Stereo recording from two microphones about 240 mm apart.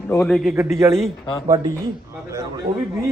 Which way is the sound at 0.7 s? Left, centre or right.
Centre.